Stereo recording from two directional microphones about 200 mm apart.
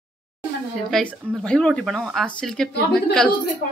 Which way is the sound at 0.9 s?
5° left (ahead or behind).